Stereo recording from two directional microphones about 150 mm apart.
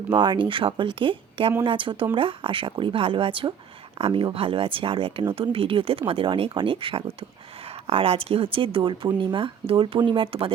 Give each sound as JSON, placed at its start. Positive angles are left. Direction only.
{"t": 0.1, "sound": "speech", "side_deg": -35}